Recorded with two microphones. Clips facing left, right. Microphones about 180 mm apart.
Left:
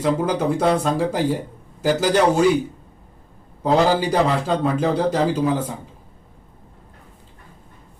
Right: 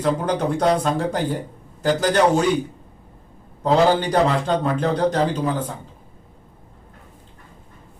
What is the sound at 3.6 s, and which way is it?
Speech, 5° left (ahead or behind).